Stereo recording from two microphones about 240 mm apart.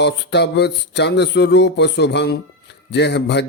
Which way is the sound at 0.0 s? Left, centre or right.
Left.